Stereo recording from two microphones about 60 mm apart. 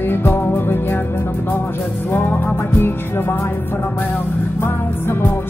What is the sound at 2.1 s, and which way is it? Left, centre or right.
Music, left.